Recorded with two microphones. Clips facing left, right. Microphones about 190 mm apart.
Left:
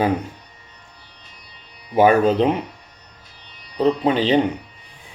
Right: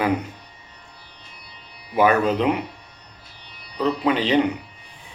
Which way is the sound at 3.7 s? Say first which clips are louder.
Left 3 dB; 35° left (ahead or behind).